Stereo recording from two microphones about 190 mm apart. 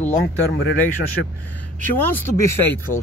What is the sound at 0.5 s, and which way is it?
Speech, 75° left (ahead or behind).